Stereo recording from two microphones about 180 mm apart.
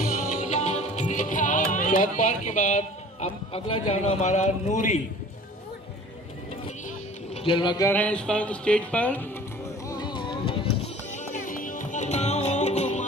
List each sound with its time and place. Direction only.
0.0 s music: 50° left (ahead or behind)
7.3 s speech: 30° left (ahead or behind)
7.9 s speech: 5° left (ahead or behind)
9.8 s music: 25° left (ahead or behind)
11.1 s music: 40° left (ahead or behind)